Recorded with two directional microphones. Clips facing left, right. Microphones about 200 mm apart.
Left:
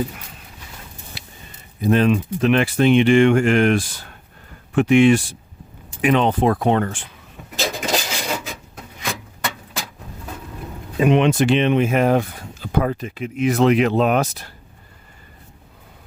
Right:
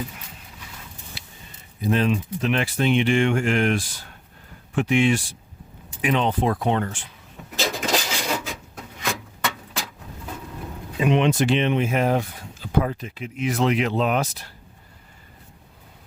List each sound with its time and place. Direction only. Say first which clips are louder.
1.9 s speech: left 5 dB; 60° left (ahead or behind)
7.6 s filing: left 1 dB; 5° left (ahead or behind)
10.9 s speech: left 4 dB; 55° left (ahead or behind)